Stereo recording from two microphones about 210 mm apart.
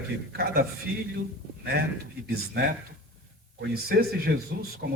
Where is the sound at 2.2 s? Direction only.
50° right (ahead or behind).